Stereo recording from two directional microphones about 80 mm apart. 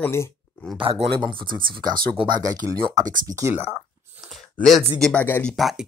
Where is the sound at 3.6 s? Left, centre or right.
Right.